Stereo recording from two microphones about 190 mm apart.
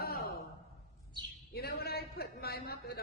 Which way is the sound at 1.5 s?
55° left (ahead or behind).